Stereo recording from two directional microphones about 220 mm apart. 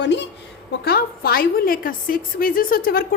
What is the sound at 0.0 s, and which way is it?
A woman's voice, 55° left (ahead or behind).